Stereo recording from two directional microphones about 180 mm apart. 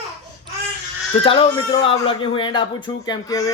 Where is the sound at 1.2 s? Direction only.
35° left (ahead or behind).